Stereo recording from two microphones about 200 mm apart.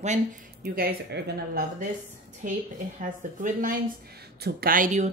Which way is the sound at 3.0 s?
40° right (ahead or behind).